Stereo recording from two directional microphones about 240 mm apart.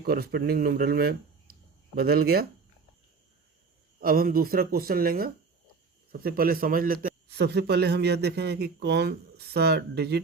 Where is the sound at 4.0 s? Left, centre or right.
Right.